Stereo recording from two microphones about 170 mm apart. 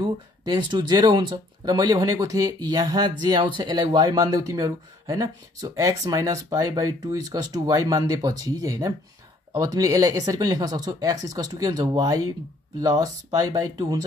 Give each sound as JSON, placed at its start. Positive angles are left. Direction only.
{"t": 0.0, "sound": "speech", "side_deg": -25}